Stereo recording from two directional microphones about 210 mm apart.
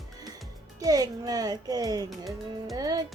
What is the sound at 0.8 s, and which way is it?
Speech, 15° right (ahead or behind).